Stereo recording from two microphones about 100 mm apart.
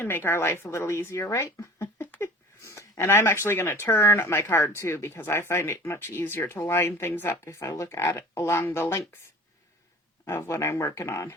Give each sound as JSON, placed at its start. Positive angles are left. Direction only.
{"t": 0.0, "sound": "speech", "side_deg": 20}
{"t": 10.2, "sound": "speech", "side_deg": 25}